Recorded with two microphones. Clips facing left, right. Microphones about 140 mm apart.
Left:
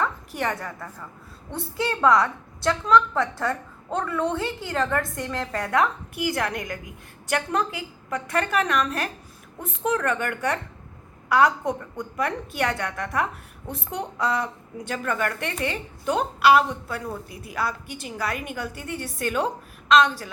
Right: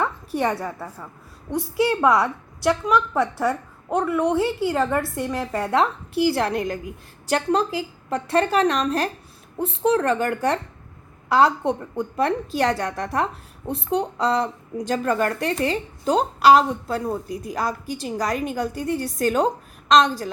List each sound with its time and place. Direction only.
0.0 s a sound: 30° right (ahead or behind)
1.7 s a woman's voice: 15° right (ahead or behind)
5.5 s a woman's voice: 25° right (ahead or behind)